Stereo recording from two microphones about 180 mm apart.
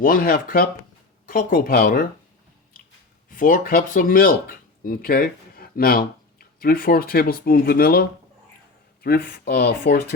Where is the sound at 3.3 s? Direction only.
50° left (ahead or behind).